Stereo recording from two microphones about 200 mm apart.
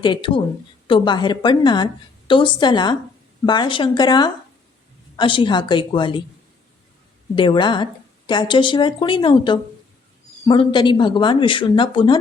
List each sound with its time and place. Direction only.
0.0 s a woman's voice: 25° left (ahead or behind)
7.3 s a woman's voice: 25° left (ahead or behind)